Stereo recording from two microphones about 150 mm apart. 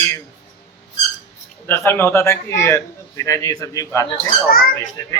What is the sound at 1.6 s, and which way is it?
A man's voice, 15° left (ahead or behind).